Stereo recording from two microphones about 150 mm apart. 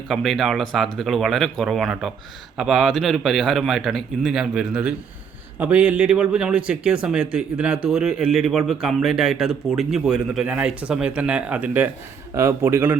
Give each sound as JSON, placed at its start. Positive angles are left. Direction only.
{"t": 0.1, "sound": "a man's voice", "side_deg": 0}